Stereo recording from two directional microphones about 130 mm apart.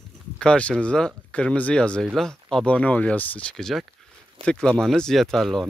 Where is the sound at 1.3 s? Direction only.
10° left (ahead or behind).